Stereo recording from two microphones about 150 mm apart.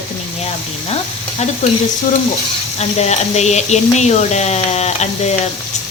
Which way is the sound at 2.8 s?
45° left (ahead or behind).